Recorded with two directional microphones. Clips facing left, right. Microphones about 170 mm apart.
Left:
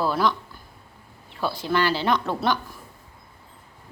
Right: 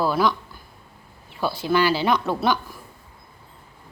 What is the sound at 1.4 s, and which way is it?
Speech, 5° right (ahead or behind).